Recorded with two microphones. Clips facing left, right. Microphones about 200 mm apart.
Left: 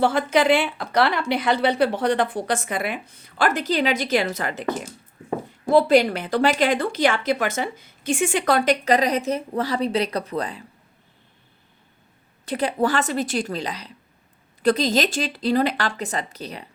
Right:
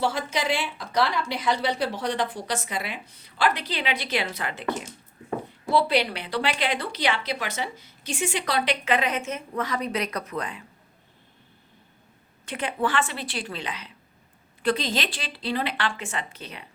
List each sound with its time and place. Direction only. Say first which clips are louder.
0.0 s a woman's voice: left 8 dB; 55° left (ahead or behind); by 10.6 s 35° left (ahead or behind)
12.5 s speech: left 5 dB; 35° left (ahead or behind)